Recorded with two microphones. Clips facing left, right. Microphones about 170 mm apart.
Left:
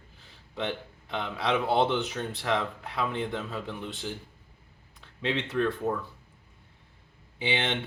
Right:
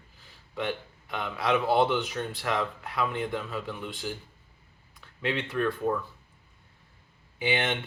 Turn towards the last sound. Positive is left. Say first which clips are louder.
# right 1 dB
turn(degrees=25)  # may be behind; listen again after turning